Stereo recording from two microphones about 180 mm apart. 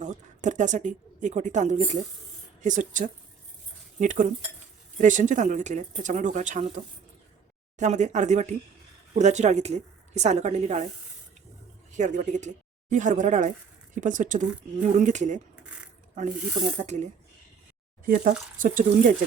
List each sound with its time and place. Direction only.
0.0 s a woman's voice: 45° right (ahead or behind)
11.9 s speech: 45° right (ahead or behind)
16.7 s a woman's voice: 40° right (ahead or behind)